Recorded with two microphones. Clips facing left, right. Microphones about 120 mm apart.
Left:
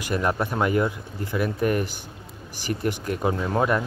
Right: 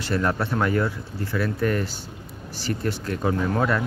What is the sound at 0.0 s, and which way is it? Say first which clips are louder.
Speech: even; 15° left (ahead or behind).